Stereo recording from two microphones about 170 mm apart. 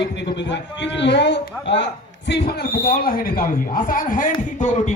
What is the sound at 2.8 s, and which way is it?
A man's voice, 60° left (ahead or behind).